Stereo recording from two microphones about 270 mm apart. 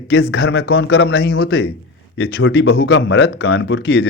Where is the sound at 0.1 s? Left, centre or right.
Left.